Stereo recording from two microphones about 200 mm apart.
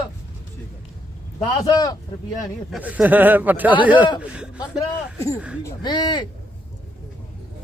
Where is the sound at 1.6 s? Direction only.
20° left (ahead or behind).